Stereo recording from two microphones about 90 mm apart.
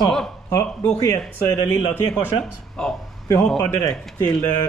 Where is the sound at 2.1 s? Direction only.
10° left (ahead or behind).